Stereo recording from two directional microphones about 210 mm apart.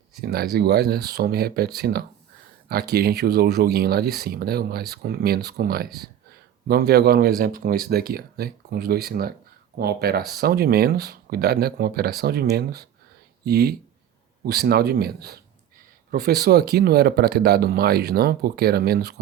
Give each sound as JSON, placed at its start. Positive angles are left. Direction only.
{"t": 0.2, "sound": "speech", "side_deg": -50}